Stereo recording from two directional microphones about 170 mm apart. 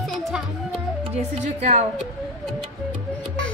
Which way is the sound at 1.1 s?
40° right (ahead or behind).